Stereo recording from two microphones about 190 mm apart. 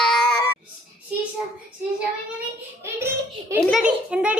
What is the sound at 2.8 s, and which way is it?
A child's voice, 15° right (ahead or behind).